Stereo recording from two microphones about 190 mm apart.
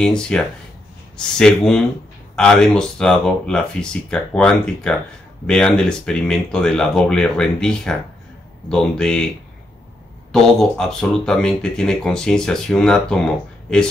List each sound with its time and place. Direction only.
0.0 s speech: 5° left (ahead or behind)
10.3 s speech: 5° left (ahead or behind)